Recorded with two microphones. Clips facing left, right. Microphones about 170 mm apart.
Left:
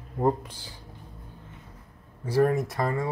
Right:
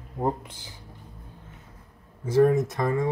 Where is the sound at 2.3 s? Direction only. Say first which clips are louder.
Right 3 dB; 20° right (ahead or behind).